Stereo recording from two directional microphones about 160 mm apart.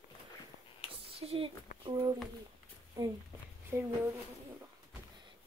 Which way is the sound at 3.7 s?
15° right (ahead or behind).